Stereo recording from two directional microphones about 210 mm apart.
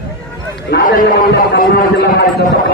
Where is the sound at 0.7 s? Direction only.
45° left (ahead or behind).